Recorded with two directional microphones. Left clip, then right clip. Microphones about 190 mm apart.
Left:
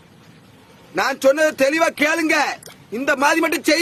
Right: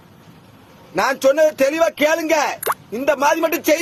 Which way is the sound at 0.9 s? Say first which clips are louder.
Right 1 dB; 15° left (ahead or behind).